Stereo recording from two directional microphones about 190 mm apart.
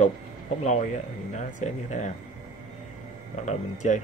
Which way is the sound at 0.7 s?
35° left (ahead or behind).